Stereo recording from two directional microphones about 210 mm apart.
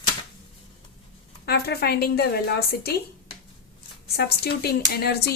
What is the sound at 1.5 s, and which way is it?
A woman's voice, 50° left (ahead or behind).